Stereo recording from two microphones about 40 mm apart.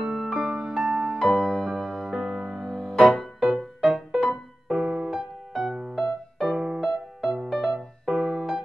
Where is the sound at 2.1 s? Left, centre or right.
Centre.